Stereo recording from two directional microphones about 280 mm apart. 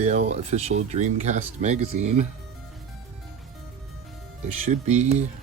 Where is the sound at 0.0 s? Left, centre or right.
Right.